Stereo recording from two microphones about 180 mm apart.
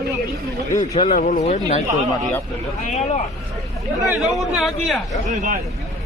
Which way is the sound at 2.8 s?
40° left (ahead or behind).